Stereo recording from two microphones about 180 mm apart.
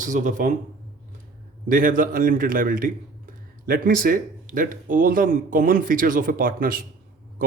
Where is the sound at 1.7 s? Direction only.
50° right (ahead or behind).